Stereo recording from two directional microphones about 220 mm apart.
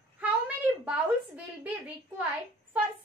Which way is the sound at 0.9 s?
5° right (ahead or behind).